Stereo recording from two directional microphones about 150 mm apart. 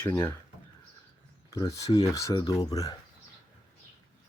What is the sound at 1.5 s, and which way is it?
Speech, 20° left (ahead or behind).